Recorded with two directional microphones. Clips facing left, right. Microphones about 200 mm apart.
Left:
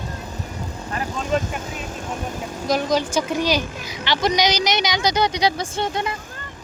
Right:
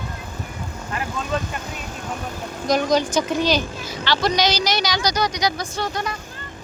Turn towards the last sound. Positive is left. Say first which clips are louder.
# left 2 dB
turn(degrees=25)  # may be behind; listen again after turning